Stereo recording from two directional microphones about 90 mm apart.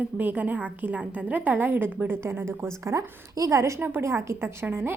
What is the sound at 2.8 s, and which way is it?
Speech, 40° right (ahead or behind).